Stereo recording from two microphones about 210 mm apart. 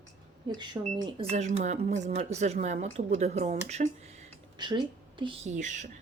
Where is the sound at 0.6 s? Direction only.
20° right (ahead or behind).